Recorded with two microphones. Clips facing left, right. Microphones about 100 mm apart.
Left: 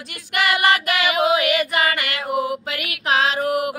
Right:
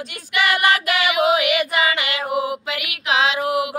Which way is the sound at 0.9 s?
40° left (ahead or behind).